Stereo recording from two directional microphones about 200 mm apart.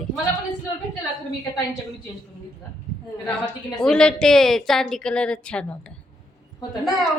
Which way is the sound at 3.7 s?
5° left (ahead or behind).